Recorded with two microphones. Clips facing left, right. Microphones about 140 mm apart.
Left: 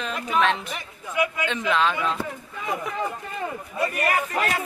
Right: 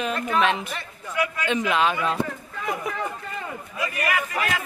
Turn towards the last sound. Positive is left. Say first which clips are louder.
# left 2 dB
turn(degrees=35)  # may be behind; listen again after turning